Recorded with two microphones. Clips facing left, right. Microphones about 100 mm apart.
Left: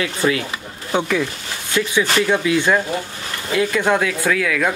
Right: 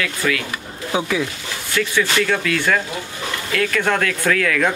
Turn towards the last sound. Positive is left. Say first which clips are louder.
# right 1 dB
turn(degrees=5)  # may be behind; listen again after turning